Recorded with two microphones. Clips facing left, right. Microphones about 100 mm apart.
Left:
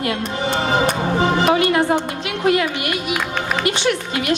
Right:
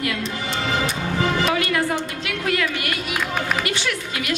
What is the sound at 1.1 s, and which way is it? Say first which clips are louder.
A woman's voice: left 4 dB; 25° left (ahead or behind).